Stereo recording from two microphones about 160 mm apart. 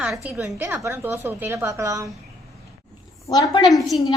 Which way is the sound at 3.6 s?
Centre (ahead or behind).